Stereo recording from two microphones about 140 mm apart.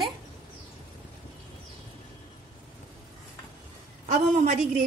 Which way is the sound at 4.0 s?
55° right (ahead or behind).